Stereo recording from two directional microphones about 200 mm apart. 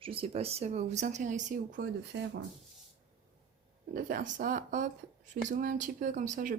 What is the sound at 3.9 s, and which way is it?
Speech, 40° right (ahead or behind).